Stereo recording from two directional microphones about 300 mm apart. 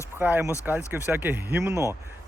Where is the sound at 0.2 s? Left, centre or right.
Centre.